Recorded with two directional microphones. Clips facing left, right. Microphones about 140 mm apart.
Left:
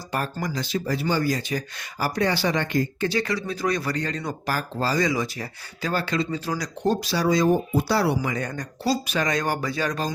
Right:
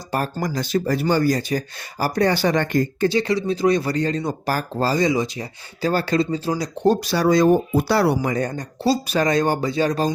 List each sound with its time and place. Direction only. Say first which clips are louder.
0.1 s speech: right 4 dB; 35° right (ahead or behind)
3.1 s speech: right 6 dB; 25° right (ahead or behind)
5.8 s speech: right 6 dB; 40° right (ahead or behind)
6.8 s speech: right 5 dB; 50° right (ahead or behind)
8.2 s speech: right 5 dB; 40° right (ahead or behind)